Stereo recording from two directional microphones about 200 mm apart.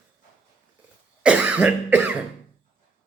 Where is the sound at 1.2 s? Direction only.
5° right (ahead or behind).